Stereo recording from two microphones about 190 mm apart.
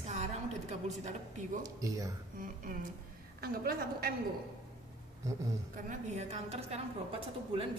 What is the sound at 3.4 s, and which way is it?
Speech, 50° right (ahead or behind).